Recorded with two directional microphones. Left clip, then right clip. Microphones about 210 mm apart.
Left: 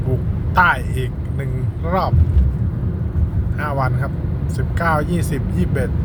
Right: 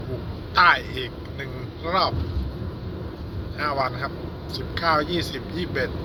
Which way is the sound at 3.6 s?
15° left (ahead or behind).